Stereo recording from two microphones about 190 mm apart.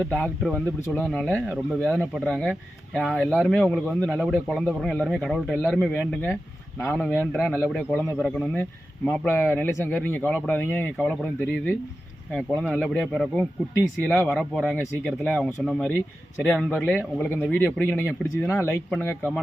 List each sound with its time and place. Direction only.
0.0 s speech: 5° left (ahead or behind)
12.3 s speech: 5° right (ahead or behind)